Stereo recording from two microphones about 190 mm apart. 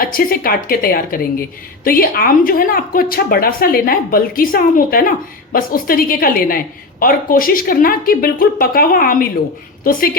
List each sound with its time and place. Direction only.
0.0 s a woman's voice: 50° left (ahead or behind)